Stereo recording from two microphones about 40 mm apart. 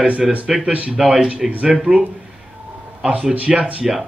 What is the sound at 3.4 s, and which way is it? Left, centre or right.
Speech, right.